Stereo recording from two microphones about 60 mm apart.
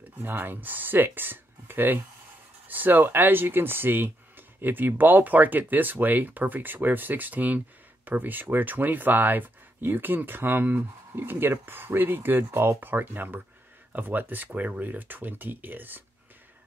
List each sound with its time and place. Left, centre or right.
0.2 s speech: right